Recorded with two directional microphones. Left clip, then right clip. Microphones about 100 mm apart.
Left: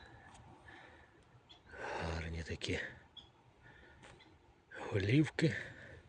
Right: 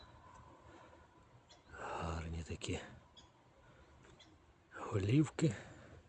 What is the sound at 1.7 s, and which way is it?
Gasp, 10° right (ahead or behind).